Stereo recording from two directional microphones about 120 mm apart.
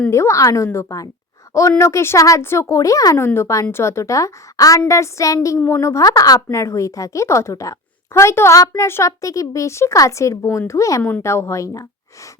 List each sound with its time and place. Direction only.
0.1 s a woman's voice: 25° left (ahead or behind)